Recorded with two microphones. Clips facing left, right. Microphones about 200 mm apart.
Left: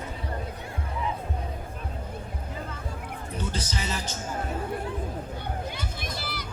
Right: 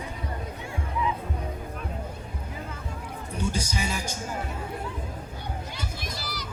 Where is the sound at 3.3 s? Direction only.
10° right (ahead or behind).